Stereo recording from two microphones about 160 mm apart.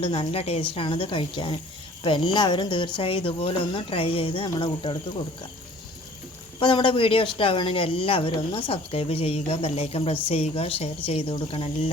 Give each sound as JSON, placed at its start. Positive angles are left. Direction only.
{"t": 0.0, "sound": "speech", "side_deg": 40}
{"t": 6.6, "sound": "speech", "side_deg": 30}